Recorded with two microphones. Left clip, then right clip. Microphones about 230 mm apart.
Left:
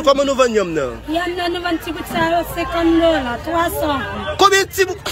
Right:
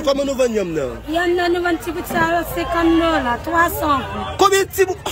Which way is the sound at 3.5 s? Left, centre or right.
Centre.